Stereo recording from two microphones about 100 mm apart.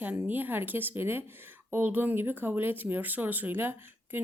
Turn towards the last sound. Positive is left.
turn(degrees=-20)  # may be behind; listen again after turning